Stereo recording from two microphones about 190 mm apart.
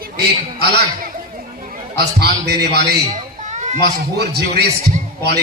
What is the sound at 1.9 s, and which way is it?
A man's voice, 60° right (ahead or behind).